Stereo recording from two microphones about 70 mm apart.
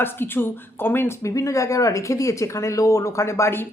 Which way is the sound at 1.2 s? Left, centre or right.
Left.